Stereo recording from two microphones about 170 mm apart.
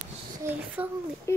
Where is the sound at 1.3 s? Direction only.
15° left (ahead or behind).